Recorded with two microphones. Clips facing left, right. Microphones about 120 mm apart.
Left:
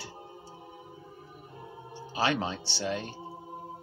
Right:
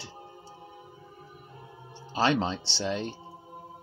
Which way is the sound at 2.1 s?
25° right (ahead or behind).